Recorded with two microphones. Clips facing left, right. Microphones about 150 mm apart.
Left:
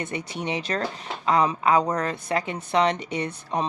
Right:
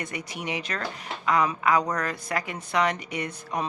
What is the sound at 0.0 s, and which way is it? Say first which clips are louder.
A woman's voice: left 4 dB; 25° left (ahead or behind).